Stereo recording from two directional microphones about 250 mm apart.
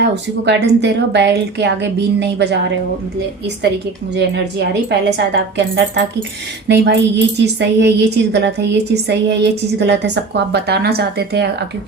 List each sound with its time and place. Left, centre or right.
0.0 s a woman's voice: right
4.1 s a woman's voice: right